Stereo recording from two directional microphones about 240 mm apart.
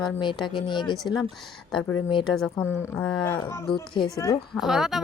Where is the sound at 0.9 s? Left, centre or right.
Centre.